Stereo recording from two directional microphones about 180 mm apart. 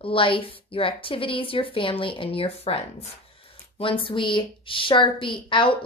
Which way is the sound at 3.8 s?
30° left (ahead or behind).